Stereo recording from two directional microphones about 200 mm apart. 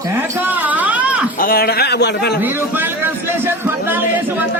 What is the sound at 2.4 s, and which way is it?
A man's voice, 10° right (ahead or behind).